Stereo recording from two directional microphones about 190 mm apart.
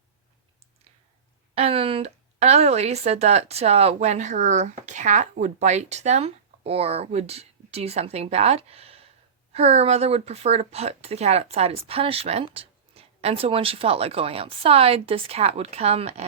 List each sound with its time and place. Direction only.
1.5 s speech: 30° right (ahead or behind)